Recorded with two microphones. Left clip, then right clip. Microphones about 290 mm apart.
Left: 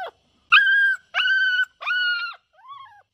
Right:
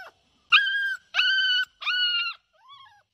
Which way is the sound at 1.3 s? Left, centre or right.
Centre.